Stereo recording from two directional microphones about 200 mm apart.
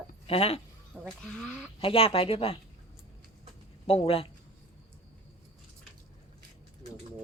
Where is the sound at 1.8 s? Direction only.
25° left (ahead or behind).